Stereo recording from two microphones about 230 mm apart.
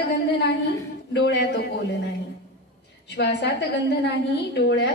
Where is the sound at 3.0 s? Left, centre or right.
Left.